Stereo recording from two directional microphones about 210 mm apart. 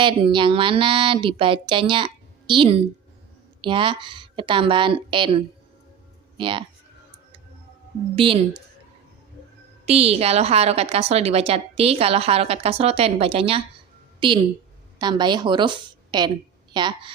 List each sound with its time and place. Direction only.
0.0 s a woman's voice: 25° right (ahead or behind)
8.1 s a woman's voice: 25° right (ahead or behind)
9.8 s a woman's voice: 30° right (ahead or behind)